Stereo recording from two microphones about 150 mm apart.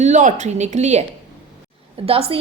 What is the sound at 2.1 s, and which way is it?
Speech, 40° right (ahead or behind).